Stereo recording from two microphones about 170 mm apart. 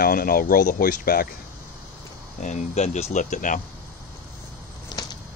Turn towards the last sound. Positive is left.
turn(degrees=25)  # may be behind; listen again after turning